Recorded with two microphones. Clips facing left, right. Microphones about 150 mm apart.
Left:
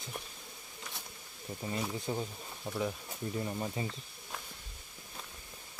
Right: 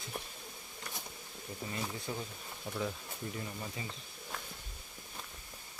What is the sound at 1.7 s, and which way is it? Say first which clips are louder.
Speech: left 5 dB; 25° left (ahead or behind).